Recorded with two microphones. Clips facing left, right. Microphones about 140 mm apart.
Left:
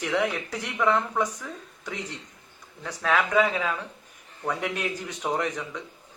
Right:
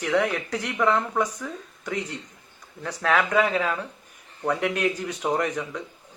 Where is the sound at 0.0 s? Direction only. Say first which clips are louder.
Right 3 dB; centre (ahead or behind).